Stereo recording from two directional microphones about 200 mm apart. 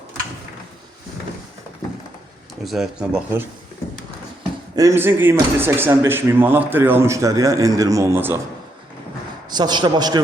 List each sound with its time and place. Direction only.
2.6 s speech: centre (ahead or behind)
4.7 s speech: 15° right (ahead or behind)
9.5 s a man's voice: 20° right (ahead or behind)